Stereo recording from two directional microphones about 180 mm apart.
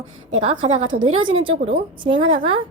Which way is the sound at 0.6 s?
35° right (ahead or behind).